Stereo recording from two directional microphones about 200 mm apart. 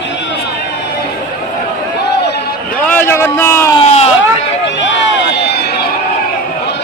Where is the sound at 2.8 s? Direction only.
10° left (ahead or behind).